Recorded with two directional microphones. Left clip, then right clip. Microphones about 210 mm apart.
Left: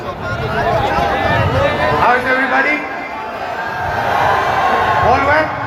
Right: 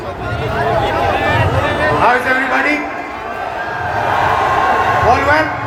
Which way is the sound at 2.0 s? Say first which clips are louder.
Even; 45° right (ahead or behind).